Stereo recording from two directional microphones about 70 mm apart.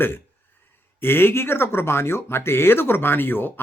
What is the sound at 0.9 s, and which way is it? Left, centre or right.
Speech, left.